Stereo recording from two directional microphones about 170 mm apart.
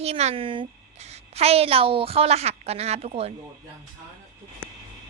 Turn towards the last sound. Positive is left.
turn(degrees=-35)  # may be behind; listen again after turning